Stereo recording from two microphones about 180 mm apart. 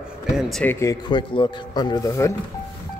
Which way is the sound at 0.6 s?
10° left (ahead or behind).